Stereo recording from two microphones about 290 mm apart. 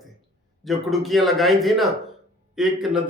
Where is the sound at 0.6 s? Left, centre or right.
Centre.